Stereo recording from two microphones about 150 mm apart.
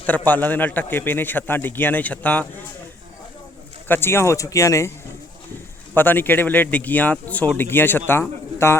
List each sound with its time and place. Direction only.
0.0 s speech: 10° left (ahead or behind)
3.8 s speech: 15° left (ahead or behind)
5.9 s speech: 15° left (ahead or behind)